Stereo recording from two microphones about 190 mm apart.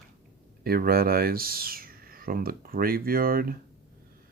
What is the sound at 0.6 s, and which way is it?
Speech, 50° right (ahead or behind).